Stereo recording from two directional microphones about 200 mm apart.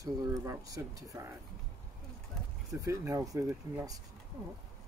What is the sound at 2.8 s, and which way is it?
Speech, 15° right (ahead or behind).